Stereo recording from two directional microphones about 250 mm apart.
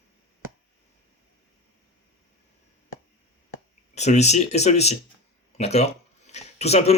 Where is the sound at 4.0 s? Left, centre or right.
Left.